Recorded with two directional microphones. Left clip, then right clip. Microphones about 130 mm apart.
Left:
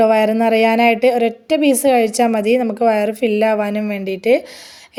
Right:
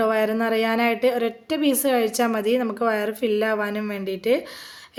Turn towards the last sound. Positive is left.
turn(degrees=30)  # may be behind; listen again after turning